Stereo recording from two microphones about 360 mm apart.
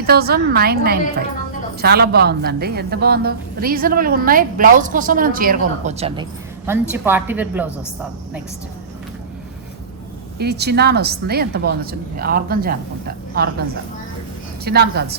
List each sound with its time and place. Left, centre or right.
0.0 s a woman's voice: right
6.9 s a woman's voice: centre
10.3 s a woman's voice: right
14.6 s a woman's voice: right